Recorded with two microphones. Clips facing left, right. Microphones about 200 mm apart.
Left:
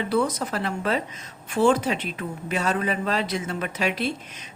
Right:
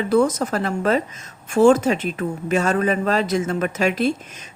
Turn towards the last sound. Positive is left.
turn(degrees=-45)  # may be behind; listen again after turning